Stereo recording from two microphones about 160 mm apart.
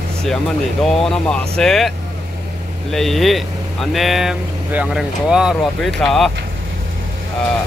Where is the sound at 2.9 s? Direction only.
Centre (ahead or behind).